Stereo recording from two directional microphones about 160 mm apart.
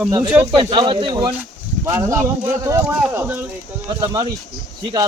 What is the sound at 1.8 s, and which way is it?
Speech, 20° right (ahead or behind).